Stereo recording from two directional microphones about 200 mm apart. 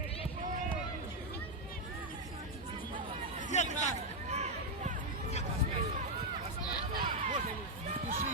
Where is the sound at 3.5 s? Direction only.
35° left (ahead or behind).